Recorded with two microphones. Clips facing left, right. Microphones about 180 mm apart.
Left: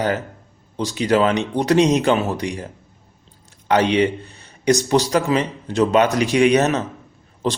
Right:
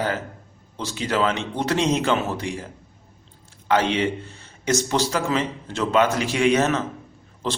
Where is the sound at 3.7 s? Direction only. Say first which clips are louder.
Left 4 dB; 15° left (ahead or behind).